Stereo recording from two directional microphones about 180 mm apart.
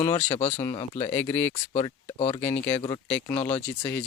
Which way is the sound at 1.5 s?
30° left (ahead or behind).